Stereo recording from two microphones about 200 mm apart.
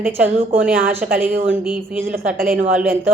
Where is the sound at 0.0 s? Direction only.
10° right (ahead or behind).